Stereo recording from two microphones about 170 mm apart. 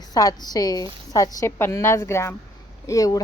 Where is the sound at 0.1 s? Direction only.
20° left (ahead or behind).